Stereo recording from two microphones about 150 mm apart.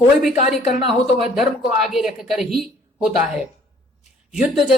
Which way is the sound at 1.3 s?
Centre (ahead or behind).